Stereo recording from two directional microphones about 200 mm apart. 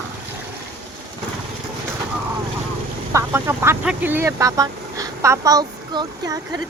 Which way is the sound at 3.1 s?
15° right (ahead or behind).